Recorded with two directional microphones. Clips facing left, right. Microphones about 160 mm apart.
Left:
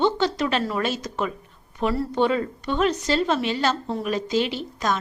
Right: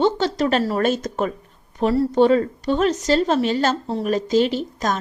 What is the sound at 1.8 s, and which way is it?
A woman's voice, 35° right (ahead or behind).